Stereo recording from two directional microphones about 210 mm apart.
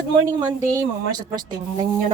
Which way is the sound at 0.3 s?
15° right (ahead or behind).